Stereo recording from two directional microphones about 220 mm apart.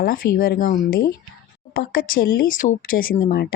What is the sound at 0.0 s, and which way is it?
A woman's voice, 40° left (ahead or behind).